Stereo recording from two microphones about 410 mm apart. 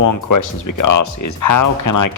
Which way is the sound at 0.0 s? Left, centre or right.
Left.